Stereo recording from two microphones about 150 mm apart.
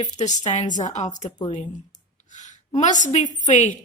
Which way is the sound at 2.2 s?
55° left (ahead or behind).